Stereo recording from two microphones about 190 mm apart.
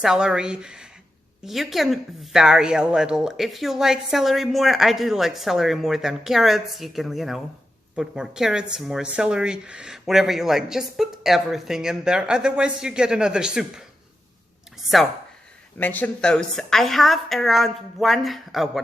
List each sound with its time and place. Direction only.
0.0 s a woman's voice: 5° right (ahead or behind)